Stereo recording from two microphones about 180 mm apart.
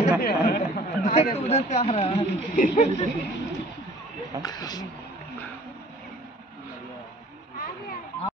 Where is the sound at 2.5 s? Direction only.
45° left (ahead or behind).